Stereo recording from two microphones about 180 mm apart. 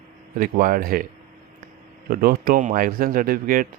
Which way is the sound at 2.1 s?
55° right (ahead or behind).